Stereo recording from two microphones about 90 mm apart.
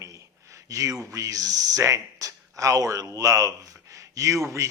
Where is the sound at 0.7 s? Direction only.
40° right (ahead or behind).